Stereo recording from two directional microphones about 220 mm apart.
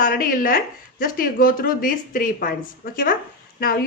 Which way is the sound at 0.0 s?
40° left (ahead or behind).